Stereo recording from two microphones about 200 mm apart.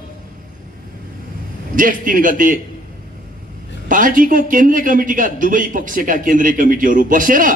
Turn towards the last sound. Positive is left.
turn(degrees=-40)  # may be behind; listen again after turning